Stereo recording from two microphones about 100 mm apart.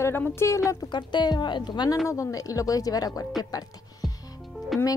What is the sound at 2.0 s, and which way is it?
Speech, 35° left (ahead or behind).